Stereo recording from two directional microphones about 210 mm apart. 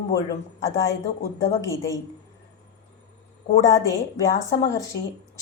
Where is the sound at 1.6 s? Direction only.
15° left (ahead or behind).